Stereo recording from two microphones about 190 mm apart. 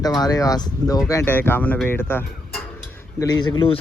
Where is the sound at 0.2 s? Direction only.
20° left (ahead or behind).